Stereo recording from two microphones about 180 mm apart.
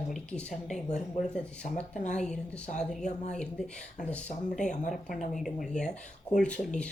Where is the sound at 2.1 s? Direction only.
5° left (ahead or behind).